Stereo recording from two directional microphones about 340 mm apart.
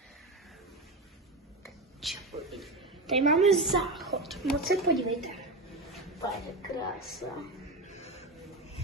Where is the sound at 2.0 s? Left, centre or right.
Centre.